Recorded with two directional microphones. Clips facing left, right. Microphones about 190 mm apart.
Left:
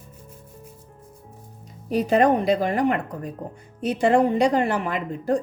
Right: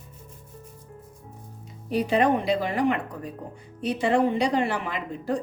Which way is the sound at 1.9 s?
45° left (ahead or behind).